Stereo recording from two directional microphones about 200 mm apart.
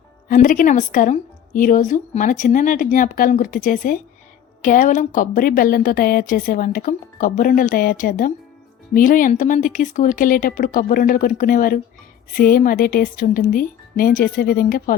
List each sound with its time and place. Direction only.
0.3 s a woman's voice: 45° left (ahead or behind)